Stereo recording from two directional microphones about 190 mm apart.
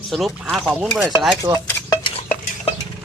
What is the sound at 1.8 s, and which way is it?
Stir, 25° left (ahead or behind).